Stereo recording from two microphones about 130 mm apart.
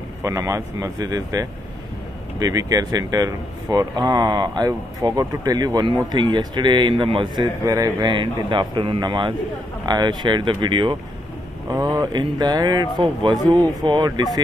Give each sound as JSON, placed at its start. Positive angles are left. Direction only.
{"t": 0.2, "sound": "speech", "side_deg": -25}
{"t": 7.6, "sound": "speech", "side_deg": -30}
{"t": 8.1, "sound": "speech", "side_deg": -40}